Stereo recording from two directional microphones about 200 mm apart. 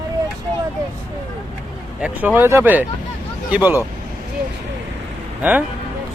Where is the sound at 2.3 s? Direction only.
10° right (ahead or behind).